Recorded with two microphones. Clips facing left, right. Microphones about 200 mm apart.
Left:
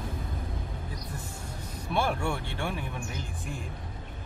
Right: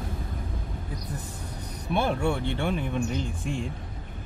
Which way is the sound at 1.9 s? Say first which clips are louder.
Right 4 dB; 20° right (ahead or behind).